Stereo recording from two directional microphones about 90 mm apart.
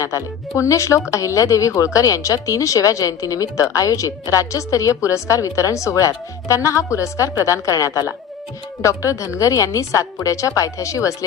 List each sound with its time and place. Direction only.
0.0 s speech: 35° left (ahead or behind)